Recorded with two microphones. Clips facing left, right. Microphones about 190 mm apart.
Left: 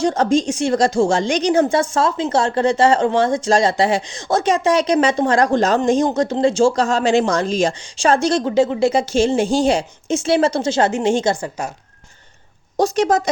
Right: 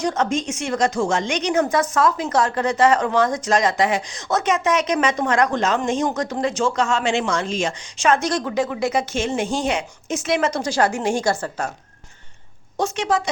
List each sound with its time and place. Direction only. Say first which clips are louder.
0.0 s a woman's voice: left 5 dB; 30° left (ahead or behind); by 11.7 s 10° left (ahead or behind)
12.7 s a woman's voice: left 5 dB; 40° left (ahead or behind)